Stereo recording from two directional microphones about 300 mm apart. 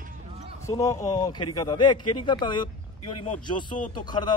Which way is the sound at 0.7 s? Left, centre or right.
Centre.